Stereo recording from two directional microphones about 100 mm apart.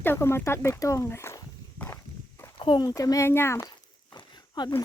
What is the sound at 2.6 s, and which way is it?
Speech, 50° left (ahead or behind).